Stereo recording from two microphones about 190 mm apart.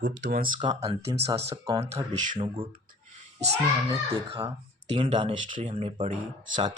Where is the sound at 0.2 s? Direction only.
55° right (ahead or behind).